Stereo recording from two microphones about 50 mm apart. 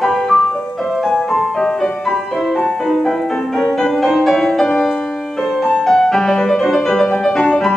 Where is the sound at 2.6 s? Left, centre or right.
Centre.